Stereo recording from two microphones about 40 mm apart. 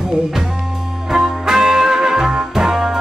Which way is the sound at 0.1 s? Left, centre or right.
Centre.